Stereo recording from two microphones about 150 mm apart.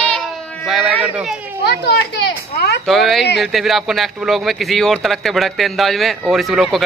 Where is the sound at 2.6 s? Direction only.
90° left.